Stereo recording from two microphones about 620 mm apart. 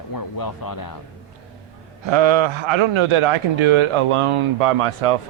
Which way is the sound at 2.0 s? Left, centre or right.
Right.